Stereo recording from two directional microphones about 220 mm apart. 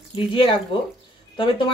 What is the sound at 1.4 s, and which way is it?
Speech, 20° left (ahead or behind).